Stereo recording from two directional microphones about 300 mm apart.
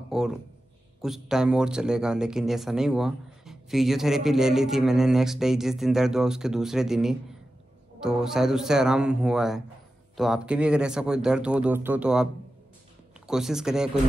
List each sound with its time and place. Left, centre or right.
0.1 s speech: centre
13.3 s speech: centre